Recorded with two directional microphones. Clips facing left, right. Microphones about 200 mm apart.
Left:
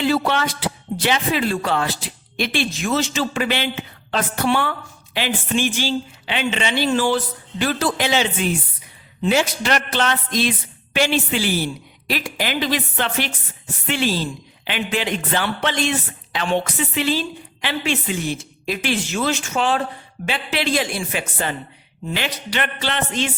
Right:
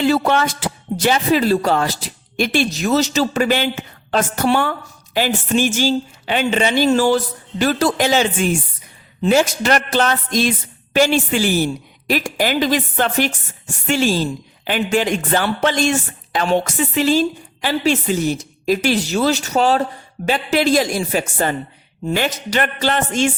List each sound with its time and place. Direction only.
0.0 s a woman's voice: 45° right (ahead or behind)